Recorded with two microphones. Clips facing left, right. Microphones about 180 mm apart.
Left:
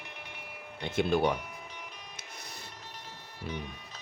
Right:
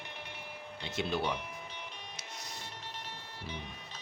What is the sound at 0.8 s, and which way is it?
Speech, 50° left (ahead or behind).